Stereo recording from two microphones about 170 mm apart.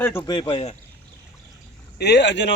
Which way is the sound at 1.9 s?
80° left.